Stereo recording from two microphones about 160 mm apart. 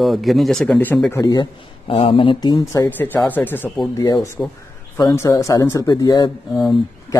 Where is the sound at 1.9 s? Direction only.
35° left (ahead or behind).